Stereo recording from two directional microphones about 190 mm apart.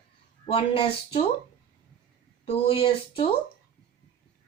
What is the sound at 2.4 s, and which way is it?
Speech, 30° left (ahead or behind).